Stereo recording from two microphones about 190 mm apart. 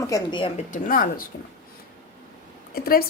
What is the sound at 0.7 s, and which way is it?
Speech, 45° left (ahead or behind).